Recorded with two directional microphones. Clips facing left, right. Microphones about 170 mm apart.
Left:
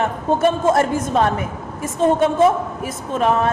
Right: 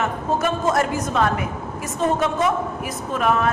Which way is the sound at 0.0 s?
30° left (ahead or behind).